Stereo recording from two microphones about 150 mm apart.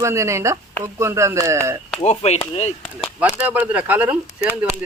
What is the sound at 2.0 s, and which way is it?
Speech, 45° left (ahead or behind).